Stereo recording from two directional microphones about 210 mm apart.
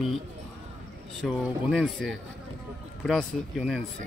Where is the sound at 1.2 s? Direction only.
Centre (ahead or behind).